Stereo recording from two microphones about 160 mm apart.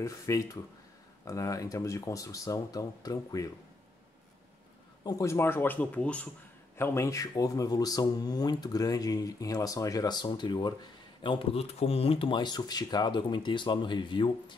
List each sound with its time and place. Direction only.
0.0 s speech: 20° left (ahead or behind)
5.0 s speech: 20° left (ahead or behind)